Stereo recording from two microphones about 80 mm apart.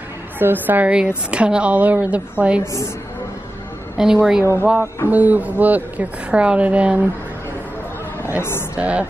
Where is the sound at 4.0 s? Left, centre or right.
Centre.